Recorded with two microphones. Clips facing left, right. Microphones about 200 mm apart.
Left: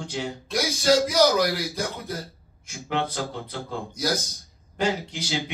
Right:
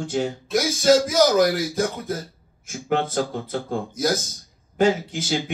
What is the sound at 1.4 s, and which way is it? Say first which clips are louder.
Speech: right 5 dB; 50° right (ahead or behind).